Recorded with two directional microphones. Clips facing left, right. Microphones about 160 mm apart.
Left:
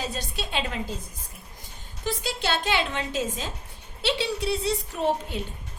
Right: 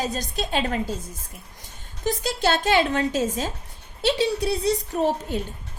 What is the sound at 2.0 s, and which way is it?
A woman's voice, 45° right (ahead or behind).